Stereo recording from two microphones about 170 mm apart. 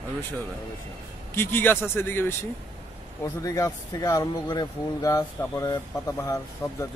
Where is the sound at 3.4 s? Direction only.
20° left (ahead or behind).